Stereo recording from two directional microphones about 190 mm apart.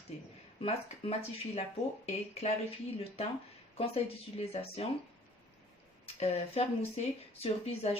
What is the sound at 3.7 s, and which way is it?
Speech, 30° left (ahead or behind).